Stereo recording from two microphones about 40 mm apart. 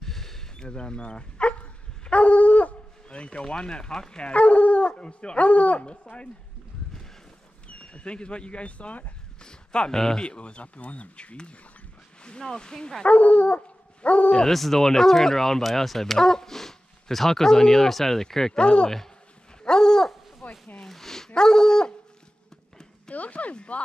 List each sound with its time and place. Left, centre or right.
0.0 s a sound: centre
0.7 s dog: left
4.3 s speech: left
7.6 s speech: left
9.4 s speech: left
10.2 s speech: left
13.0 s dog: left
14.5 s speech: centre; by 18.9 s left
19.6 s dog: centre
20.1 s dog: centre
20.8 s a sound: centre
21.4 s speech: centre
23.0 s speech: left
23.5 s speech: left